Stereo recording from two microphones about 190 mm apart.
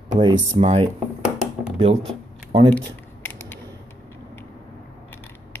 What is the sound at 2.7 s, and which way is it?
Shuffling cards, 10° left (ahead or behind).